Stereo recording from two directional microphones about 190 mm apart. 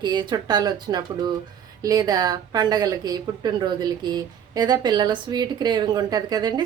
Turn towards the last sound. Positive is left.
turn(degrees=-20)  # may be behind; listen again after turning